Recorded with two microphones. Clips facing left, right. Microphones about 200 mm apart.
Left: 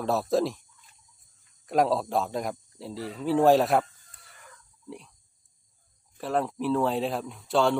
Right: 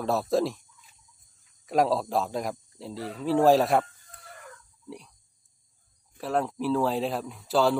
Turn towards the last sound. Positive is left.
turn(degrees=0)  # may be behind; listen again after turning